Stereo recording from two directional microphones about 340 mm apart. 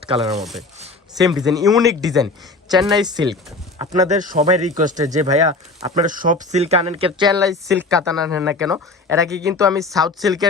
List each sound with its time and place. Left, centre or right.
0.2 s speech: centre
2.0 s speech: centre